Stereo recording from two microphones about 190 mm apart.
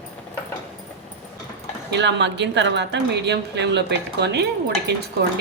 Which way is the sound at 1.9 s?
65° right (ahead or behind).